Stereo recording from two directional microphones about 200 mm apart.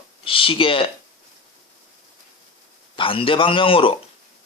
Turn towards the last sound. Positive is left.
turn(degrees=25)  # may be behind; listen again after turning